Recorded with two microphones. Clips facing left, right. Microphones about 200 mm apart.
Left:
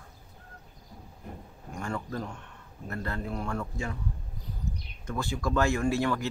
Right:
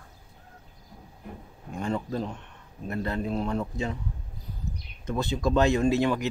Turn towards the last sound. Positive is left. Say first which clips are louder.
# right 4 dB
turn(degrees=-20)  # may be behind; listen again after turning